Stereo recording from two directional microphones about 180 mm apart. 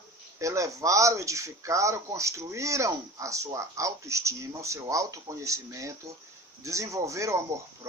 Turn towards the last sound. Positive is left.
turn(degrees=-15)  # may be behind; listen again after turning